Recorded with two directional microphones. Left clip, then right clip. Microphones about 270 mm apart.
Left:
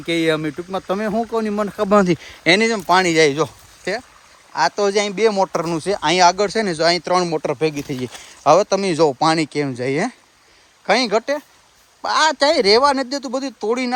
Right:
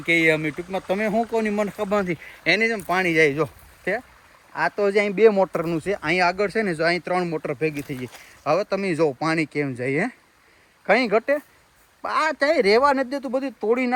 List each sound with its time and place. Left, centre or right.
0.0 s speech: centre
1.9 s speech: left
2.7 s speech: centre